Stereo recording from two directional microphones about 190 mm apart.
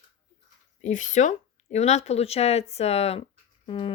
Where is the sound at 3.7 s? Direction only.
25° left (ahead or behind).